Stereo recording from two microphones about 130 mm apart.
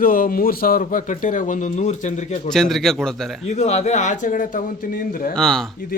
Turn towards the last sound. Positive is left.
turn(degrees=5)  # may be behind; listen again after turning